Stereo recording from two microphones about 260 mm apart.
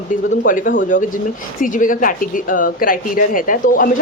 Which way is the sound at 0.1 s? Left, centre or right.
Left.